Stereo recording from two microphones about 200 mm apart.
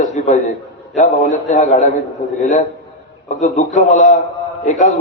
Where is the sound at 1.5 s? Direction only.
35° left (ahead or behind).